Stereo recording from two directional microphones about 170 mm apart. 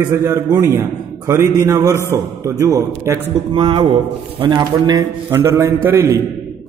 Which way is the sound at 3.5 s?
30° right (ahead or behind).